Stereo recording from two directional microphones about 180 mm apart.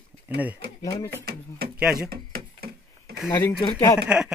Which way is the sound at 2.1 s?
60° right (ahead or behind).